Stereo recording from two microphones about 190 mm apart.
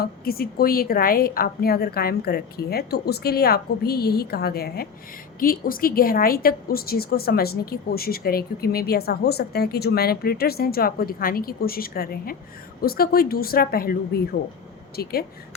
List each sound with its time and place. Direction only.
0.0 s a woman's voice: 50° left (ahead or behind)